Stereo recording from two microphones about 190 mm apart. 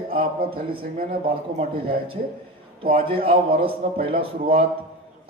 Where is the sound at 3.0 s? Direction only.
30° right (ahead or behind).